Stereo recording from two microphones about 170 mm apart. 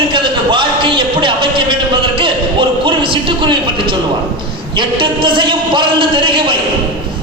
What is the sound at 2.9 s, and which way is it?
A man's voice, 30° right (ahead or behind).